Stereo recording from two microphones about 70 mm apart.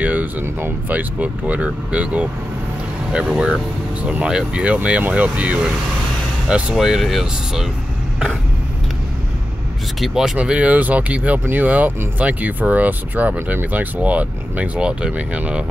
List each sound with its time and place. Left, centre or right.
0.0 s a sound: right
0.6 s speech: right
6.7 s speech: centre
9.9 s speech: centre
10.3 s speech: centre